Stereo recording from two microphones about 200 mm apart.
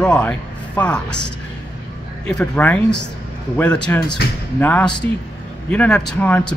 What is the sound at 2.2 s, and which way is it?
Speech, 5° left (ahead or behind).